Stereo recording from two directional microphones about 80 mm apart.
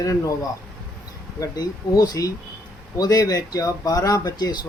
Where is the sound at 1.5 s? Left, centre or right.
Left.